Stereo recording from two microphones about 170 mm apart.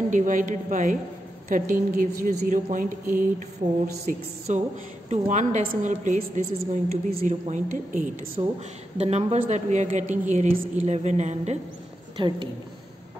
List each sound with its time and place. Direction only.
0.1 s a woman's voice: 50° right (ahead or behind)
12.2 s a woman's voice: 25° right (ahead or behind)